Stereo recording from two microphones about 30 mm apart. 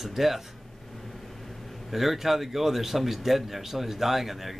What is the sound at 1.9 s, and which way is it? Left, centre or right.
Speech, centre.